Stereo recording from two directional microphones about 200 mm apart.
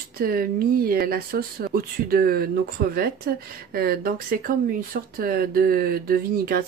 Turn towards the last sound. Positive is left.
turn(degrees=-50)  # may be behind; listen again after turning